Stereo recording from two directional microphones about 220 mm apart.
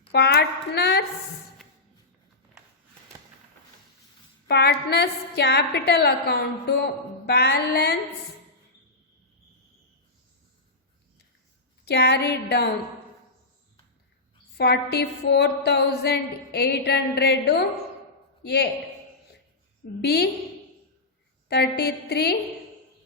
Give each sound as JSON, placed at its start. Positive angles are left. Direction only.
{"t": 0.1, "sound": "a sound", "side_deg": 50}
{"t": 4.4, "sound": "a woman's voice", "side_deg": 50}
{"t": 11.9, "sound": "a woman's voice", "side_deg": 50}
{"t": 14.6, "sound": "a woman's voice", "side_deg": 50}
{"t": 20.0, "sound": "a woman's voice", "side_deg": 45}
{"t": 21.5, "sound": "a woman's voice", "side_deg": 45}